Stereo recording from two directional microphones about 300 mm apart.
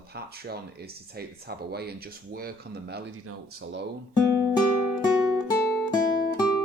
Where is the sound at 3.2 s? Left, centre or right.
Right.